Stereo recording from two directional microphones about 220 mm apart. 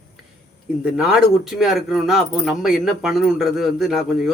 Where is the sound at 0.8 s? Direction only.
Centre (ahead or behind).